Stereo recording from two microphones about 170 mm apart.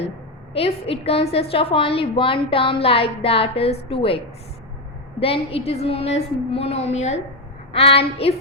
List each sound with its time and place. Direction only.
0.5 s a woman's voice: 35° left (ahead or behind)
5.2 s a woman's voice: 35° left (ahead or behind)